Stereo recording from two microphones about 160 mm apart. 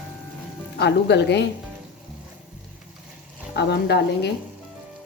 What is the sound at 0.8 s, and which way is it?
Speech, 90° left.